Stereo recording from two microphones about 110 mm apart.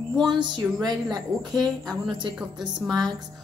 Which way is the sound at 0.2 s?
45° right (ahead or behind).